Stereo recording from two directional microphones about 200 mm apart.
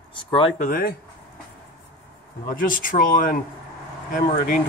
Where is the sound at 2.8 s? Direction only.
40° left (ahead or behind).